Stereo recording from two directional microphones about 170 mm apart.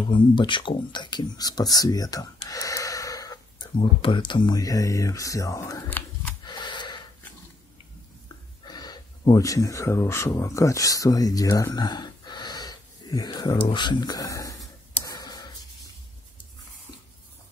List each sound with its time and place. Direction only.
0.1 s speech: 30° left (ahead or behind)
6.4 s gasp: 25° left (ahead or behind)
8.6 s speech: 25° left (ahead or behind)
15.0 s writing: 25° left (ahead or behind)